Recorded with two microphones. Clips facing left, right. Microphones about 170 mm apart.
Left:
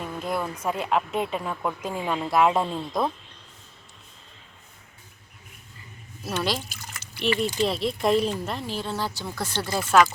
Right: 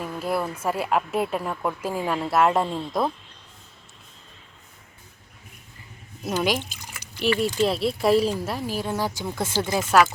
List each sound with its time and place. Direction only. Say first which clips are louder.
0.0 s a woman's voice: right 2 dB; 5° right (ahead or behind)
6.4 s a woman's voice: right 3 dB; 15° right (ahead or behind)
9.2 s speech: right 4 dB; 20° right (ahead or behind)